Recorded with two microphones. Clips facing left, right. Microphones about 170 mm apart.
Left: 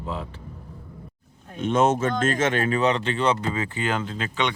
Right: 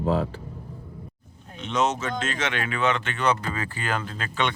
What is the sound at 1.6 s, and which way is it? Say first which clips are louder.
Speech: left 5 dB; 50° left (ahead or behind).